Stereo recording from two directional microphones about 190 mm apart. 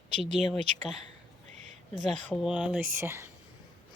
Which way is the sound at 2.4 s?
5° right (ahead or behind).